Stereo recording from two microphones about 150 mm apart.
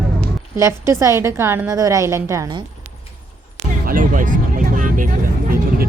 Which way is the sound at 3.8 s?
65° right (ahead or behind).